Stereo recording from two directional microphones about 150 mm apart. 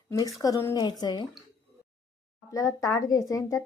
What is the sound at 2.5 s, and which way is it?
Speech, 20° left (ahead or behind).